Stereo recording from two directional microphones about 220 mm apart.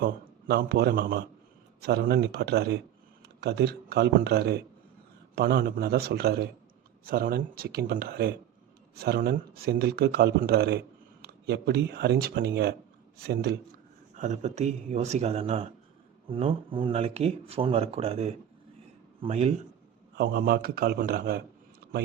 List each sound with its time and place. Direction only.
0.0 s a man's voice: 45° right (ahead or behind)
14.2 s speech: 30° right (ahead or behind)
20.1 s speech: 45° right (ahead or behind)